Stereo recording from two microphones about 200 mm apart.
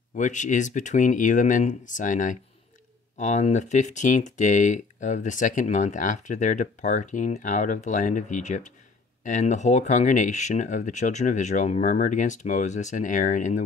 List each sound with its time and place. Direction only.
0.1 s speech: 40° left (ahead or behind)